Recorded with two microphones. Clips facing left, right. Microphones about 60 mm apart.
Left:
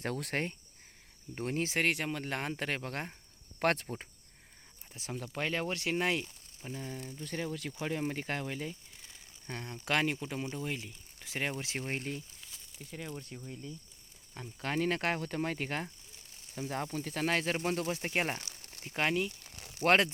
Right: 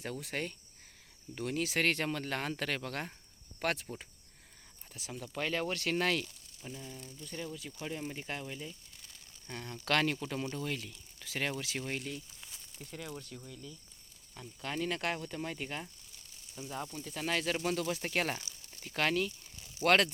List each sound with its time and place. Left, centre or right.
0.0 s speech: left
1.4 s speech: left
1.8 s speech: centre
3.6 s speech: left
4.9 s speech: left
7.9 s speech: left
9.5 s speech: left
11.5 s speech: left
12.7 s speech: centre
13.1 s speech: left
18.3 s crumpling: left
18.9 s speech: left
19.3 s a sound: left
19.8 s speech: left